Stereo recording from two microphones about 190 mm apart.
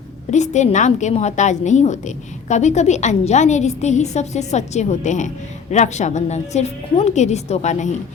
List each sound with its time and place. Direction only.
0.3 s a woman's voice: 40° left (ahead or behind)